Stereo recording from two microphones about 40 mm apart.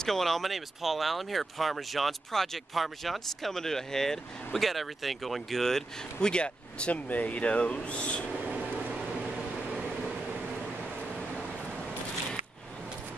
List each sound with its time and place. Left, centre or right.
0.0 s speech: centre
4.6 s speech: centre
6.2 s speech: left
7.1 s speech: left